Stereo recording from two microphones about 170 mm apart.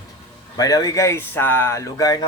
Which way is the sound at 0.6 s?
20° left (ahead or behind).